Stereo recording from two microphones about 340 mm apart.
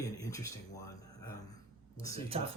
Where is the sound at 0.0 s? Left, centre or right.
Centre.